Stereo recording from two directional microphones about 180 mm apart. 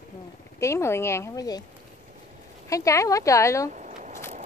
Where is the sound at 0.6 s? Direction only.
15° left (ahead or behind).